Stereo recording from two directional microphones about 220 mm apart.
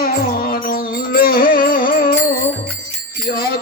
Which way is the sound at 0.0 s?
45° left (ahead or behind).